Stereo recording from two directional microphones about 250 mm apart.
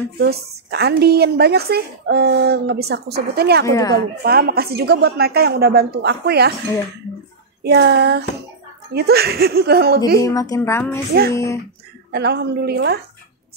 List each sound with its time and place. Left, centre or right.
0.2 s a woman's voice: right
3.6 s speech: centre
4.2 s a woman's voice: right
7.6 s a woman's voice: right
10.2 s speech: centre
12.1 s a woman's voice: right